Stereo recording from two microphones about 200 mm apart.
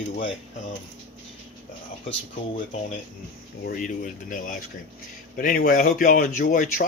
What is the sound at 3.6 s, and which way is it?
Speech, 40° left (ahead or behind).